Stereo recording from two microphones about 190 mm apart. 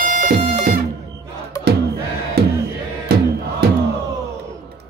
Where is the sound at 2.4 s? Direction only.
55° right (ahead or behind).